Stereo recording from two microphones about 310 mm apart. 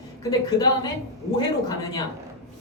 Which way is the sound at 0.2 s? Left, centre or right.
Centre.